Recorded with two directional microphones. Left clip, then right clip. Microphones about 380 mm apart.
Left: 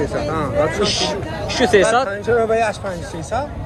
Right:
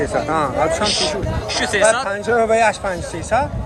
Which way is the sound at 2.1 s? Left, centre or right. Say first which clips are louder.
Right 1 dB; centre.